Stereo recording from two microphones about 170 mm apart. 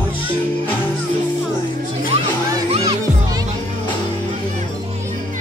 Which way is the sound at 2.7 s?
35° right (ahead or behind).